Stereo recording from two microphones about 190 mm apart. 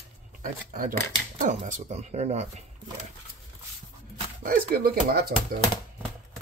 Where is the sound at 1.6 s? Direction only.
40° right (ahead or behind).